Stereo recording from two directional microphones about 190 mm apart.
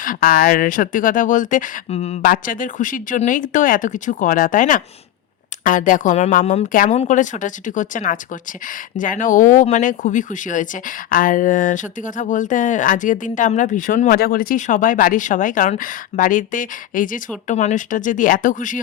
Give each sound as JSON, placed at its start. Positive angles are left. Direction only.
{"t": 0.0, "sound": "speech", "side_deg": 45}